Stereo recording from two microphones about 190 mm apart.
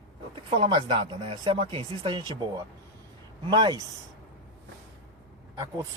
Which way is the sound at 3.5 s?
20° right (ahead or behind).